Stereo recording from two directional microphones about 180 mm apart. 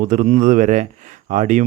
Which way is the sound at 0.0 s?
45° right (ahead or behind).